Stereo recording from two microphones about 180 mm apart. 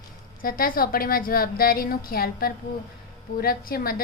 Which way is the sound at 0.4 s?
50° left (ahead or behind).